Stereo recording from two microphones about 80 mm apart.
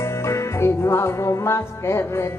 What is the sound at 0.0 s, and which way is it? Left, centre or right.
Music, left.